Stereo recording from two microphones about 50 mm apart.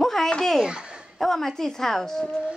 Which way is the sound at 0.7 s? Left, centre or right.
Centre.